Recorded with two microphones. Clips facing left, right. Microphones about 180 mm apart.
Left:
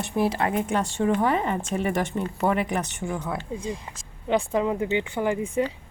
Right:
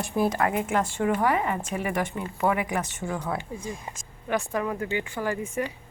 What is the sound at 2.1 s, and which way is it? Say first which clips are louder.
Speech: left 5 dB; 35° left (ahead or behind).